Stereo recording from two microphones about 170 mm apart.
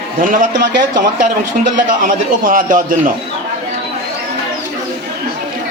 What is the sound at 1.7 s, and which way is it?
A man's voice, 55° right (ahead or behind).